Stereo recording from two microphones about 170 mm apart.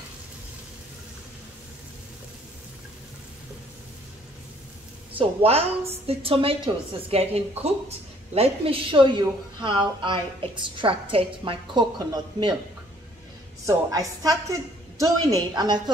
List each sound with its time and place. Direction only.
5.2 s a woman's voice: 35° right (ahead or behind)
13.7 s a woman's voice: 20° right (ahead or behind)